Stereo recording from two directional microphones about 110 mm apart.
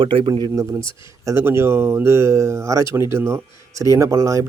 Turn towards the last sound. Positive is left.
turn(degrees=-30)  # may be behind; listen again after turning